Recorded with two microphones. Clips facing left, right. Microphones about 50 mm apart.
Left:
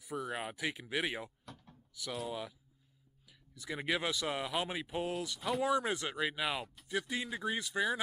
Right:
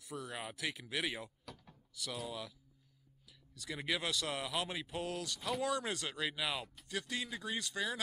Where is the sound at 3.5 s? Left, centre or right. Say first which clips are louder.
Left 3 dB; centre.